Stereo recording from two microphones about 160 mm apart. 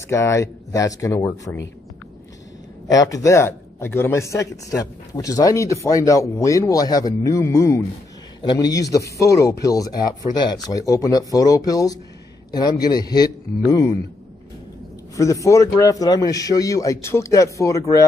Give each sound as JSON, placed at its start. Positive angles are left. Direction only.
{"t": 0.1, "sound": "speech", "side_deg": 20}
{"t": 2.9, "sound": "speech", "side_deg": 20}
{"t": 15.1, "sound": "speech", "side_deg": 20}